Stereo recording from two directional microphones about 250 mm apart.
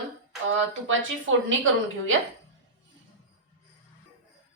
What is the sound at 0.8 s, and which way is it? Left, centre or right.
Speech, right.